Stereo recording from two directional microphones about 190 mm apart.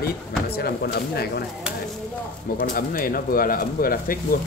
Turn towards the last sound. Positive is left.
turn(degrees=50)  # may be behind; listen again after turning